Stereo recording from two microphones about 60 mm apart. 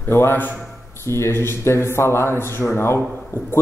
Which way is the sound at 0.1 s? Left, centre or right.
Left.